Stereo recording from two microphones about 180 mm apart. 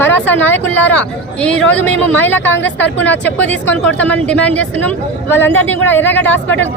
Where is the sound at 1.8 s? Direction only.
10° left (ahead or behind).